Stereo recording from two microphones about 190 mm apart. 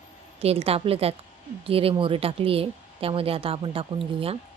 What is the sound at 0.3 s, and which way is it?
A woman's voice, 30° right (ahead or behind).